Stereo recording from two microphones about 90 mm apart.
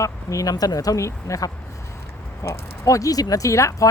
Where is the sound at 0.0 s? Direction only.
40° left (ahead or behind).